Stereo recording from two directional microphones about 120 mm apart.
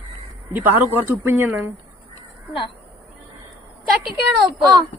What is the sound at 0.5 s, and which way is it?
A woman's voice, 15° right (ahead or behind).